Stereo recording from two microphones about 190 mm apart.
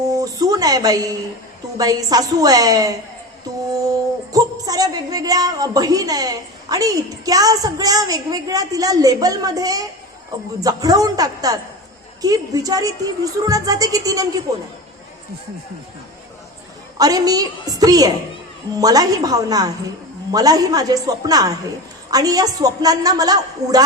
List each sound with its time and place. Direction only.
0.1 s a woman's voice: 20° right (ahead or behind)
4.3 s a woman's voice: 20° right (ahead or behind)
17.0 s a woman's voice: 20° right (ahead or behind)